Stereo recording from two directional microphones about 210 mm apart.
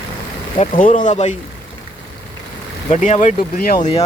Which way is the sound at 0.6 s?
40° left (ahead or behind).